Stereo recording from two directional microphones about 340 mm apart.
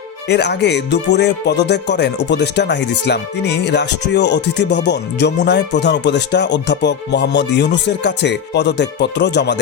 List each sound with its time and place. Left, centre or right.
0.3 s speech: left